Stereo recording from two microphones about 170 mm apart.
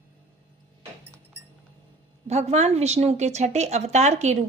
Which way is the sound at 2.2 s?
40° right (ahead or behind).